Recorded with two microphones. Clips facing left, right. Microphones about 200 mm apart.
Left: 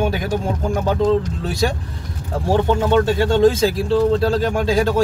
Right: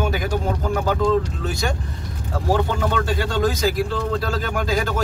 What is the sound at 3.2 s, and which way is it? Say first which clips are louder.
Speech: left 7 dB; 25° left (ahead or behind).